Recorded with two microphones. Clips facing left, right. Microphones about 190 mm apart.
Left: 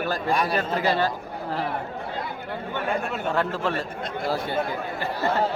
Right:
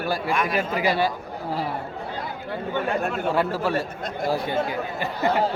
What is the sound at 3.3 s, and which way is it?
Speech, 10° right (ahead or behind).